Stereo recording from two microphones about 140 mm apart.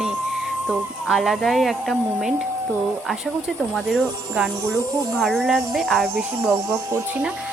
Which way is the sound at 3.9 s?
5° right (ahead or behind).